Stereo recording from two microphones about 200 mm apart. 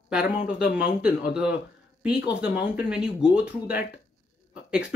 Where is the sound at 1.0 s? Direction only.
5° right (ahead or behind).